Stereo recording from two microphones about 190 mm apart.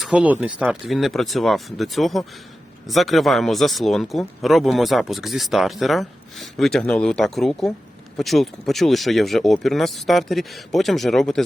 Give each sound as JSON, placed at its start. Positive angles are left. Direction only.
{"t": 0.0, "sound": "speech", "side_deg": -5}